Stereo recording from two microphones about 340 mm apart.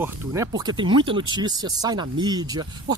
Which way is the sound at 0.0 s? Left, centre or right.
Centre.